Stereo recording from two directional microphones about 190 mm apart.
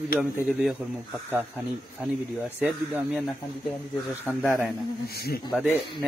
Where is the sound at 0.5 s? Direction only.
Centre (ahead or behind).